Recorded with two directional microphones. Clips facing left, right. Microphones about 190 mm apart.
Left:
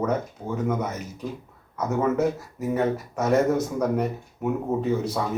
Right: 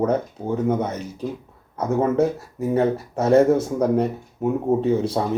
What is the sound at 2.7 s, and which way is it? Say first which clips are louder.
Speech: right 4 dB; 30° right (ahead or behind).